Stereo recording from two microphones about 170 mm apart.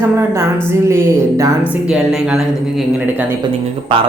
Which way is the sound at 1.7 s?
Centre (ahead or behind).